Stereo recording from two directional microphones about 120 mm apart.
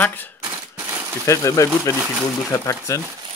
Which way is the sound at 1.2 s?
25° left (ahead or behind).